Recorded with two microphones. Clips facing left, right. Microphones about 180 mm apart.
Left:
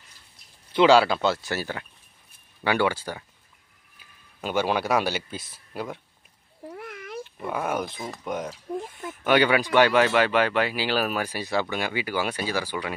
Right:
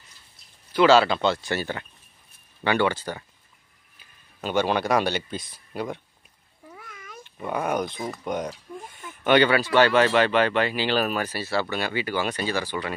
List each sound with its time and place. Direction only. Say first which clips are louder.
0.7 s speech: even; 15° left (ahead or behind)
4.4 s speech: right 1 dB; 5° left (ahead or behind)
6.8 s a sound: left 8 dB; 65° left (ahead or behind)
7.4 s speech: right 2 dB; centre (ahead or behind)